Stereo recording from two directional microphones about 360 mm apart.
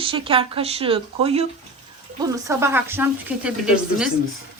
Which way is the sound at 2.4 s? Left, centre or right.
Centre.